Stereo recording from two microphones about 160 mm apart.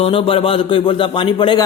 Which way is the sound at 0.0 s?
35° left (ahead or behind).